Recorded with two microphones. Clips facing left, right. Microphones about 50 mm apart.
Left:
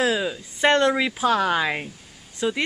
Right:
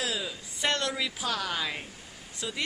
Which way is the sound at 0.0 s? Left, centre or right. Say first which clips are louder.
Left 10 dB; left.